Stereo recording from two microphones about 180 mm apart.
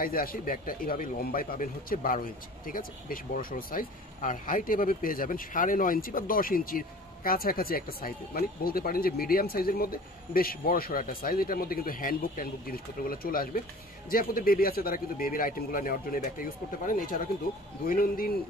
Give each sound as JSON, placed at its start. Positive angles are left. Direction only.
{"t": 0.0, "sound": "a man's voice", "side_deg": 55}